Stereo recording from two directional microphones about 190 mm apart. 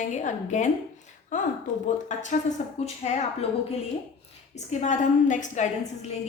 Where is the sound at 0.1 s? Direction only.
40° left (ahead or behind).